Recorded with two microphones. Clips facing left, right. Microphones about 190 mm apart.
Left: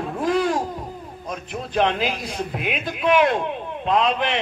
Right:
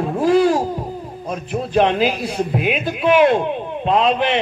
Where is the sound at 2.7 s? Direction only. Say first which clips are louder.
Right 3 dB; 5° right (ahead or behind).